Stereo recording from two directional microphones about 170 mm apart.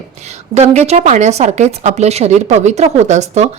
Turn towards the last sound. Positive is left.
turn(degrees=-40)  # may be behind; listen again after turning